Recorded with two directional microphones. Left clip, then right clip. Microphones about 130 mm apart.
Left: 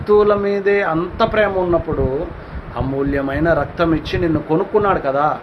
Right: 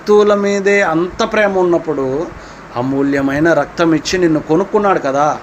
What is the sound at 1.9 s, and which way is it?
Speech, 70° right (ahead or behind).